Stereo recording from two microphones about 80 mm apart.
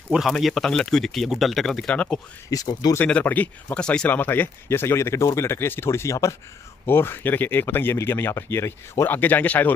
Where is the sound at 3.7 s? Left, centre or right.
Centre; by 6.3 s left.